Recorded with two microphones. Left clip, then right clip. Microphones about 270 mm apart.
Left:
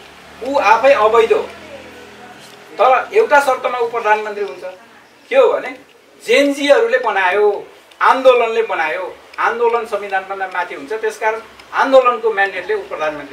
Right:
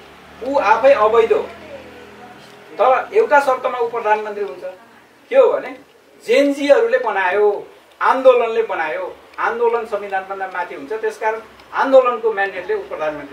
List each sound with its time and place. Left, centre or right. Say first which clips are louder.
0.6 s a man's voice: left 2 dB; centre
2.8 s a man's voice: left 2 dB; centre